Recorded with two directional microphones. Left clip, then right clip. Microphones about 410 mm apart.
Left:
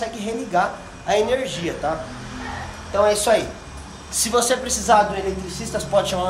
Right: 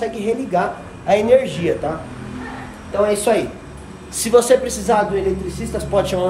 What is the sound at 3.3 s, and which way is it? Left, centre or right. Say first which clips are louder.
A woman's voice: right 1 dB; centre.